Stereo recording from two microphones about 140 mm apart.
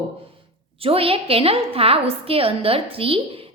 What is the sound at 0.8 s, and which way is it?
A woman's voice, 40° right (ahead or behind).